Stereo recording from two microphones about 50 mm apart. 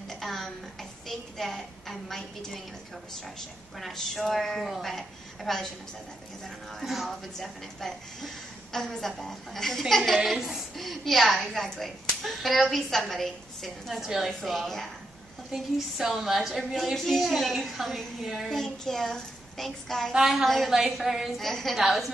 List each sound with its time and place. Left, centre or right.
0.2 s a sound: centre
3.7 s a woman's voice: centre
6.8 s a woman's voice: centre
10.3 s a woman's voice: centre
10.8 s a woman's voice: centre
15.5 s a woman's voice: centre
20.1 s a woman's voice: centre
20.4 s a woman's voice: centre
20.7 s a woman's voice: centre
21.4 s a woman's voice: centre
21.7 s a woman's voice: centre